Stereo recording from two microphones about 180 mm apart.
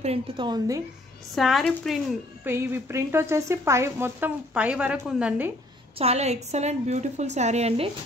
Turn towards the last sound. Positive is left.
turn(degrees=-35)  # may be behind; listen again after turning